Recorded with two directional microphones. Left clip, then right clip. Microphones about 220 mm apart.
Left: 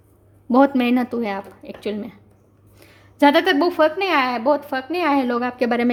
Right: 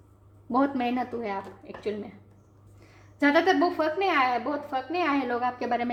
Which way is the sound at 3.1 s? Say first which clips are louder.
Left 7 dB; 50° left (ahead or behind).